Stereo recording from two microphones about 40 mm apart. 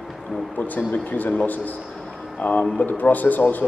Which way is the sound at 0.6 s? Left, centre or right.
Left.